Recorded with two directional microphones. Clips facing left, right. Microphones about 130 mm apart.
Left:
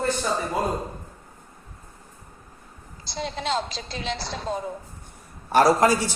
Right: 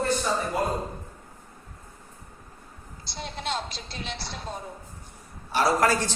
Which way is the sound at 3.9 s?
90° left.